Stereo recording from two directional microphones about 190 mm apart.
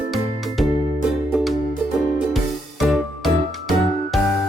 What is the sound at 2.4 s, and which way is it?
Music, centre (ahead or behind).